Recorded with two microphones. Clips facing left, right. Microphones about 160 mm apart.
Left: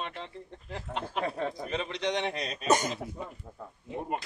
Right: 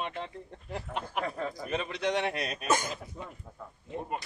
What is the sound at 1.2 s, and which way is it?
Speech, 25° left (ahead or behind).